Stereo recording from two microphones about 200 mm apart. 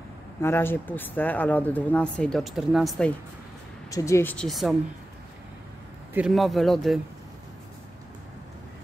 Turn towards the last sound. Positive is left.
turn(degrees=0)  # may be behind; listen again after turning